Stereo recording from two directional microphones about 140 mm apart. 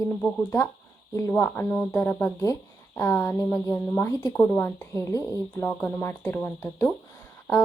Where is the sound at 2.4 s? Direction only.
20° left (ahead or behind).